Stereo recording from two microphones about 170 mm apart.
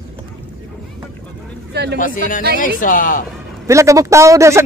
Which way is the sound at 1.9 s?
55° left (ahead or behind).